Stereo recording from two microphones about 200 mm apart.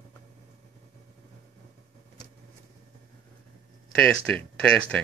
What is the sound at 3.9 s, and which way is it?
Speech, 5° left (ahead or behind).